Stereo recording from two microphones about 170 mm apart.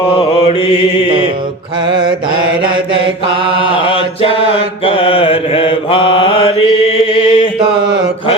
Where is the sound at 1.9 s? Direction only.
30° right (ahead or behind).